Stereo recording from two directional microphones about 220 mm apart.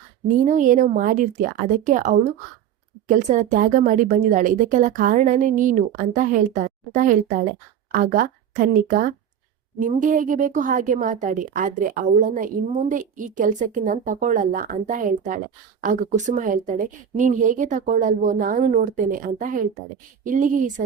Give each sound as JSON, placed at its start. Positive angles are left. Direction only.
{"t": 0.4, "sound": "a woman's voice", "side_deg": -35}